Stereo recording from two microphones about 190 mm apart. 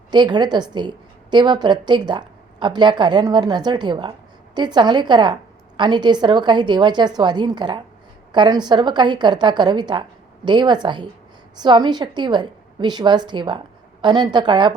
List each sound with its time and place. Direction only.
0.1 s a woman's voice: 25° right (ahead or behind)